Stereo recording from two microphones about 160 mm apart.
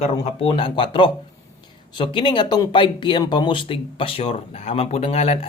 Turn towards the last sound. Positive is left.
turn(degrees=40)  # may be behind; listen again after turning